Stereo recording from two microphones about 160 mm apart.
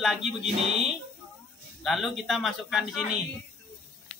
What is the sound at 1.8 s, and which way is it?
Speech, centre (ahead or behind).